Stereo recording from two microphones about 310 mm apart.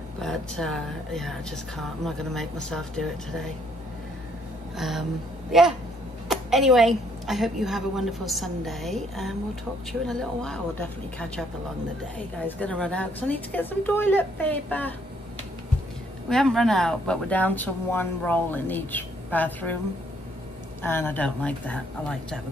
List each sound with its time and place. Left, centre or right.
0.2 s speech: centre
4.7 s speech: centre
12.4 s speech: centre
16.3 s speech: centre
20.8 s speech: centre